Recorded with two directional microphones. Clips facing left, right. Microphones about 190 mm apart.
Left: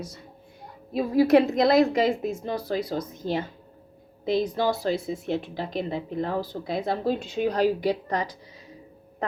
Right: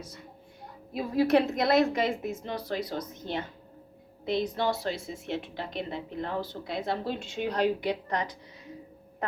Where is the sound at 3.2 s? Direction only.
35° left (ahead or behind).